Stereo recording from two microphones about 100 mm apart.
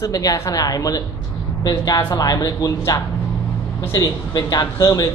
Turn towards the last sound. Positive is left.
turn(degrees=35)  # may be behind; listen again after turning